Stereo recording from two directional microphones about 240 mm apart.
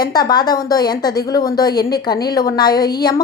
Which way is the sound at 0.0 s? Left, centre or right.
Centre.